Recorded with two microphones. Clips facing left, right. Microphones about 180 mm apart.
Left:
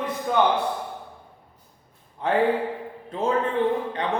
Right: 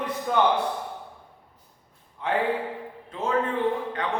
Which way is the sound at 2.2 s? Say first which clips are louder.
Left 4 dB; 35° left (ahead or behind).